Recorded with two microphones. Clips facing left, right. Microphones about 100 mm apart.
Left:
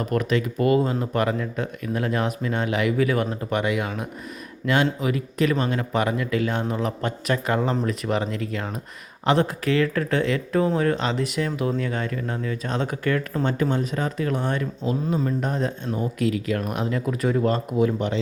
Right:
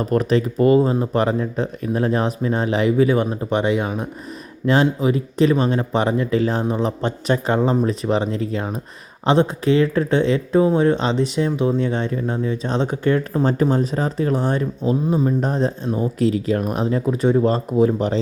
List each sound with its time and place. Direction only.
0.0 s speech: 35° right (ahead or behind)